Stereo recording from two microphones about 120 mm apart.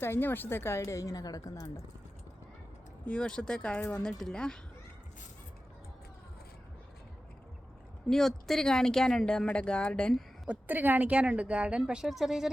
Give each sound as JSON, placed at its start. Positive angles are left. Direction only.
{"t": 0.0, "sound": "a woman's voice", "side_deg": 20}
{"t": 3.1, "sound": "speech", "side_deg": 5}
{"t": 8.1, "sound": "speech", "side_deg": 5}
{"t": 10.5, "sound": "speech", "side_deg": -15}